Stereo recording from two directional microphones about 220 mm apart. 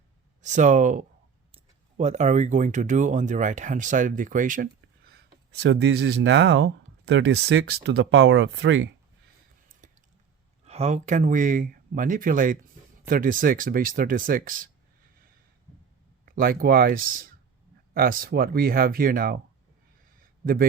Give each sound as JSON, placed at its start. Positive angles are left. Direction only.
{"t": 0.4, "sound": "speech", "side_deg": -35}
{"t": 10.7, "sound": "speech", "side_deg": -30}
{"t": 16.3, "sound": "speech", "side_deg": -40}
{"t": 20.1, "sound": "a sound", "side_deg": -40}